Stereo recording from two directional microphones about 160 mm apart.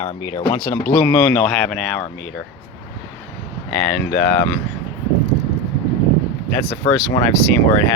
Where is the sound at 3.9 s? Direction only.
10° left (ahead or behind).